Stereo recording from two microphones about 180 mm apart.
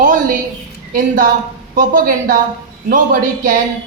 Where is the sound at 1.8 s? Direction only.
50° right (ahead or behind).